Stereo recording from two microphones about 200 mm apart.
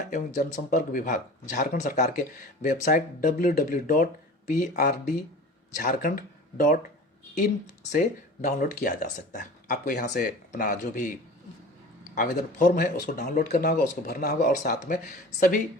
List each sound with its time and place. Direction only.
0.1 s speech: 40° left (ahead or behind)
7.9 s speech: 40° left (ahead or behind)
12.1 s speech: 40° left (ahead or behind)